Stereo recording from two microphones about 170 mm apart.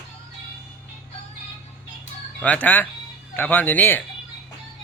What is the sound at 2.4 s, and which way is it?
Speech, 10° left (ahead or behind).